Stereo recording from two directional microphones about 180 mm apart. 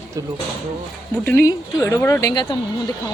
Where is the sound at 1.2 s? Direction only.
10° left (ahead or behind).